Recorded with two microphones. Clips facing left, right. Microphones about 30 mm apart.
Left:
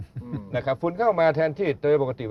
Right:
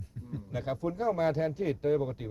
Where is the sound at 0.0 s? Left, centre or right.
Left.